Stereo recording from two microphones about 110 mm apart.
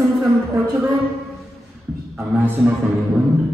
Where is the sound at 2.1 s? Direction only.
25° right (ahead or behind).